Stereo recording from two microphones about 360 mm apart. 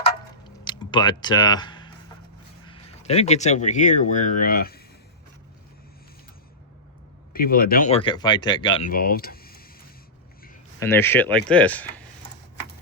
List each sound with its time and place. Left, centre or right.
0.6 s speech: centre
7.3 s speech: left
10.8 s speech: centre